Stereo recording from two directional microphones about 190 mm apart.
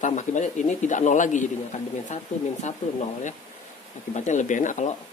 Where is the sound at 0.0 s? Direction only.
40° left (ahead or behind).